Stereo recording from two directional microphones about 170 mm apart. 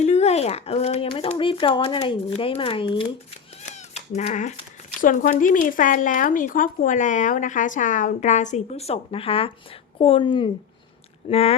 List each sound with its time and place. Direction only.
0.0 s speech: 40° left (ahead or behind)
3.8 s a woman's voice: 40° left (ahead or behind)